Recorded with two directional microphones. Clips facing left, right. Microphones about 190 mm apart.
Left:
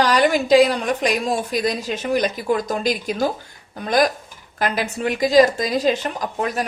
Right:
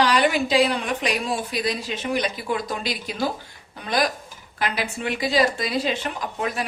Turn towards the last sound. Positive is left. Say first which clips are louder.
# left 4 dB
turn(degrees=40)  # may be behind; listen again after turning